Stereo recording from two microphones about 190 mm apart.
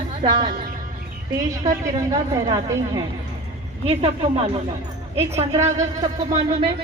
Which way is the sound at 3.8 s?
30° right (ahead or behind).